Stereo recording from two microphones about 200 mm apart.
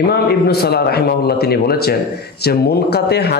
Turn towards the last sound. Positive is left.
turn(degrees=55)  # may be behind; listen again after turning